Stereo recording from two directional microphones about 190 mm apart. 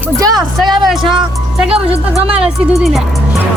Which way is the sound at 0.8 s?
Centre (ahead or behind).